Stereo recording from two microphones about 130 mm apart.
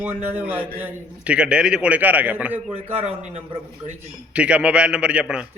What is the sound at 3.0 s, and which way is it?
Speech, 55° right (ahead or behind).